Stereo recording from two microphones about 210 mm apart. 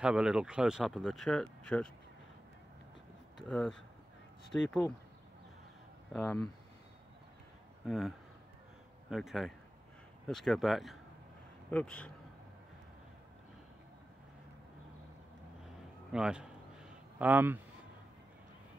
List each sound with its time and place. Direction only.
0.0 s speech: 5° right (ahead or behind)
3.3 s speech: 5° left (ahead or behind)
6.1 s speech: 5° left (ahead or behind)
7.8 s speech: centre (ahead or behind)
9.1 s speech: centre (ahead or behind)
16.1 s speech: 5° right (ahead or behind)